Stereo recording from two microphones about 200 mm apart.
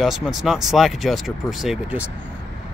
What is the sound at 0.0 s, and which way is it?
Speech, centre (ahead or behind).